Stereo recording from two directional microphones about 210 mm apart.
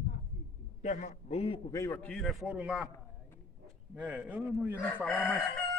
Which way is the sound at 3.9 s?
5° right (ahead or behind).